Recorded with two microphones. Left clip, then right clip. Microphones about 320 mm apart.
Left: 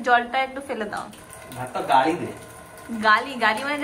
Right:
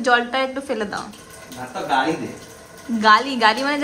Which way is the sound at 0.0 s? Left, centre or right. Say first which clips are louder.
Right 2 dB; centre.